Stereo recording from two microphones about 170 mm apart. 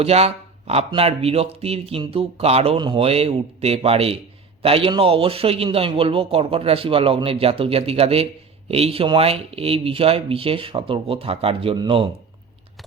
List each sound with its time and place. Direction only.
0.0 s a man's voice: 35° right (ahead or behind)